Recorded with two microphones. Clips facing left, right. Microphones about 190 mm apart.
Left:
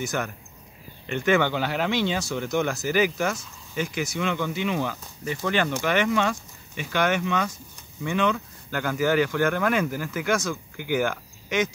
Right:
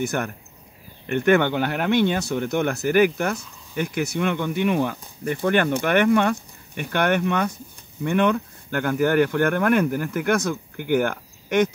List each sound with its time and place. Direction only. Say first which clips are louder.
0.0 s speech: right 3 dB; 60° right (ahead or behind)